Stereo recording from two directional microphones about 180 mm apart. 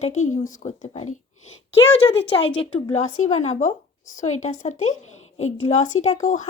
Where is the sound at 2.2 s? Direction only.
30° left (ahead or behind).